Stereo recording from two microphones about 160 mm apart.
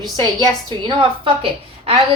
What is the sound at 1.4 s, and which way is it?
Speech, 35° right (ahead or behind).